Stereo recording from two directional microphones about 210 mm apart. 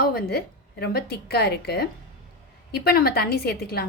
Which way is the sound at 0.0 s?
45° left (ahead or behind).